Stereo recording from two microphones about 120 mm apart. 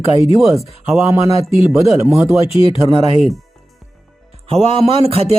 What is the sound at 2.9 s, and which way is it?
Speech, 50° right (ahead or behind).